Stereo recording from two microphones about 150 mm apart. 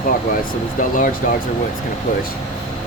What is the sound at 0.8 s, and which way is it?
Speech, 60° left (ahead or behind).